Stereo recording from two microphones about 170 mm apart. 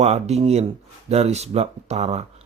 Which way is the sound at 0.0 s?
40° right (ahead or behind).